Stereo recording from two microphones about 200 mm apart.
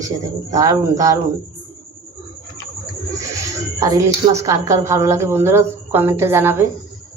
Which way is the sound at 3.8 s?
15° right (ahead or behind).